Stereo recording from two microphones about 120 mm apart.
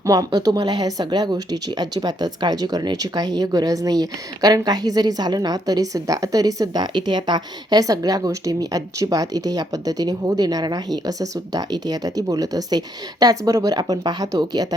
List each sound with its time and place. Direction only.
0.0 s speech: 30° right (ahead or behind)